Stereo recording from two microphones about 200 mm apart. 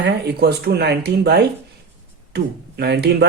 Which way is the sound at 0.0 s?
55° right (ahead or behind).